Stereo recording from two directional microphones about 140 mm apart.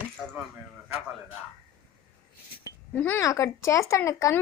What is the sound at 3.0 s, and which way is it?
Speech, 15° left (ahead or behind).